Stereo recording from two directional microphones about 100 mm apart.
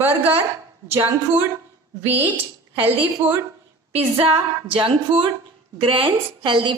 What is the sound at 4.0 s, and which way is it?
A woman's voice, 75° right (ahead or behind).